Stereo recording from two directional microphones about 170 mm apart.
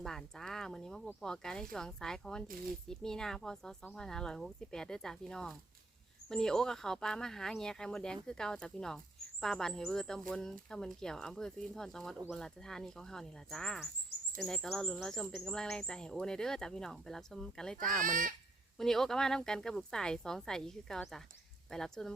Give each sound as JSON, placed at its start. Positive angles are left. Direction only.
{"t": 0.0, "sound": "speech", "side_deg": 5}
{"t": 18.0, "sound": "speech", "side_deg": -50}
{"t": 18.8, "sound": "speech", "side_deg": 0}